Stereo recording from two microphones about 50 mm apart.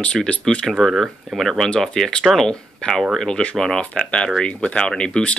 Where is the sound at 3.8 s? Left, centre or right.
Left.